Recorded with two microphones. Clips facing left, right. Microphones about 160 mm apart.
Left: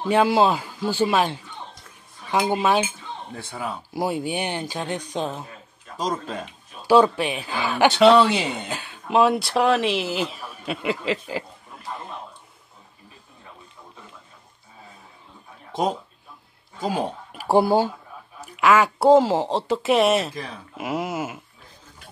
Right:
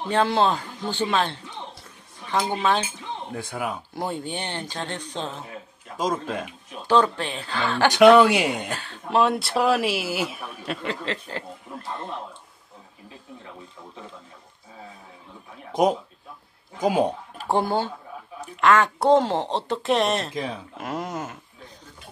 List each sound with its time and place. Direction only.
0.1 s speech: 10° left (ahead or behind)
3.5 s speech: 10° right (ahead or behind)
3.9 s speech: 10° left (ahead or behind)
5.9 s speech: 5° right (ahead or behind)
6.9 s speech: 10° left (ahead or behind)
7.9 s speech: 10° right (ahead or behind)
8.7 s speech: 10° left (ahead or behind); by 10.3 s 10° right (ahead or behind)
10.6 s speech: 5° left (ahead or behind)
15.7 s speech: 15° right (ahead or behind)
17.4 s speech: 10° left (ahead or behind)